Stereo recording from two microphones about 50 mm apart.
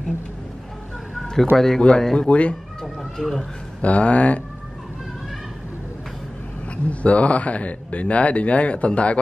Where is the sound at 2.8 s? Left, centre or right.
Centre.